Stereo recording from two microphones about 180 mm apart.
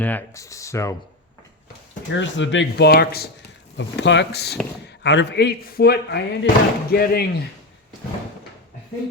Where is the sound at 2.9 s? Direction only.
60° left (ahead or behind).